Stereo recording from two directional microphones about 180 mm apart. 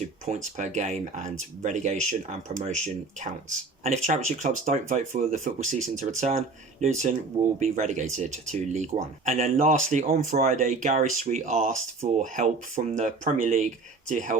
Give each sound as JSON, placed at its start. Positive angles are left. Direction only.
{"t": 0.3, "sound": "speech", "side_deg": -40}